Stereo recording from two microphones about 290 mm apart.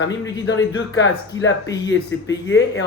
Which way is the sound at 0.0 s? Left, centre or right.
Left.